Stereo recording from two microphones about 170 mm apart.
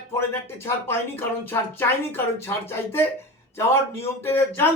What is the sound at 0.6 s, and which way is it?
A man's voice, 15° left (ahead or behind).